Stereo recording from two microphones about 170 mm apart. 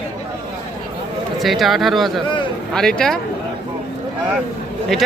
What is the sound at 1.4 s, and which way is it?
A man's voice, centre (ahead or behind).